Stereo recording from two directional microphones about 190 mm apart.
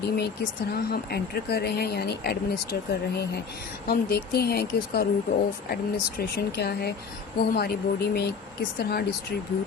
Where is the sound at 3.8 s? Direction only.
55° left (ahead or behind).